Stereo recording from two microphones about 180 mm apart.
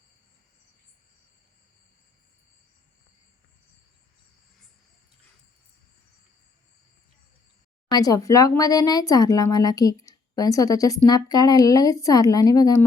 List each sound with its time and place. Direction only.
7.9 s speech: 20° left (ahead or behind)